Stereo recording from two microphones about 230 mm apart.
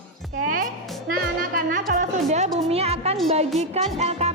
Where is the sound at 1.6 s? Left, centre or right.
Right.